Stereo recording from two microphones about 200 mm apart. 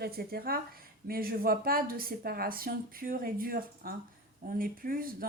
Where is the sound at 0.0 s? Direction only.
50° right (ahead or behind).